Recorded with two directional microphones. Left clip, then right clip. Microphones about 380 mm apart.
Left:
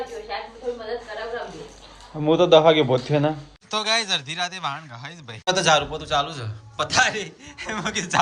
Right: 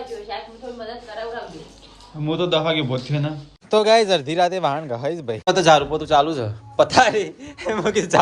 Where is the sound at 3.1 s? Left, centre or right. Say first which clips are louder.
Left 6 dB; left.